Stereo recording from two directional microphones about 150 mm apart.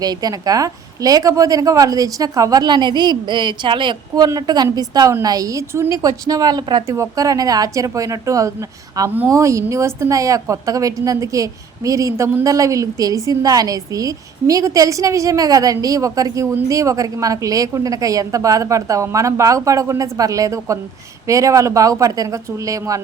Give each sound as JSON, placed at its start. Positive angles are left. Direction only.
{"t": 0.0, "sound": "a woman's voice", "side_deg": -25}